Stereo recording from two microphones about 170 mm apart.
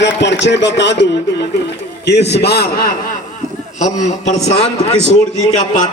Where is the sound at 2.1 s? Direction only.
80° left.